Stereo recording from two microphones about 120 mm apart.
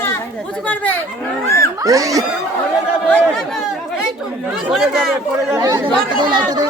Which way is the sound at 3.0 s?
10° left (ahead or behind).